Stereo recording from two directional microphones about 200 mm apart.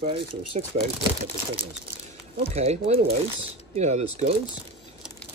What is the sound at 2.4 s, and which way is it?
Speech, 30° right (ahead or behind).